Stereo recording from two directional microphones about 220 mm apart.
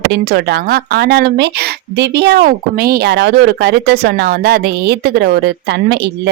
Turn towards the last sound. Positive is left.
turn(degrees=-50)  # may be behind; listen again after turning